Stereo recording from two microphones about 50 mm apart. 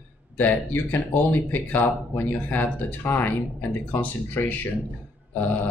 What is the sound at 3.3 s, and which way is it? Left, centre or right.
Speech, left.